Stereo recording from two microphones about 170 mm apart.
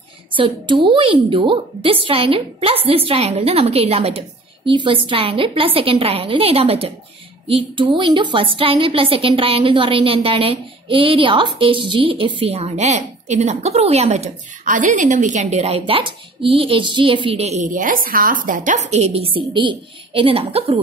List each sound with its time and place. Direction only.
0.4 s a woman's voice: 30° right (ahead or behind)